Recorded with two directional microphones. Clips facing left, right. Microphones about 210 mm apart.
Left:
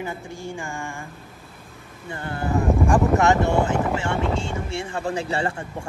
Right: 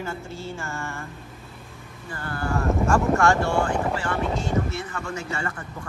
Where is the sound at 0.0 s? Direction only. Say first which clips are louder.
Left 1 dB; 15° left (ahead or behind).